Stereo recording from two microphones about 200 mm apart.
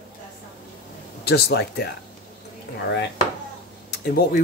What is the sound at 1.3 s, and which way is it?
Speech, 55° left (ahead or behind).